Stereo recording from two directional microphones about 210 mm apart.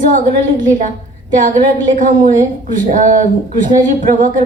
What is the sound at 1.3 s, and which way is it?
A woman's voice, 40° right (ahead or behind).